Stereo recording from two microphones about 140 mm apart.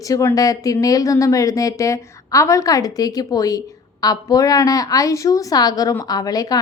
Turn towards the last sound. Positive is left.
turn(degrees=25)  # may be behind; listen again after turning